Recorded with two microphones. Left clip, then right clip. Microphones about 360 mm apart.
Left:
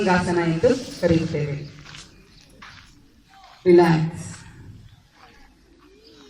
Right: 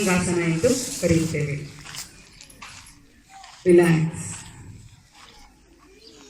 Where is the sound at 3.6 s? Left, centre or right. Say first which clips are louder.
Left 2 dB; left.